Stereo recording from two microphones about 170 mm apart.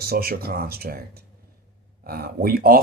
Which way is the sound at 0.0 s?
65° right (ahead or behind).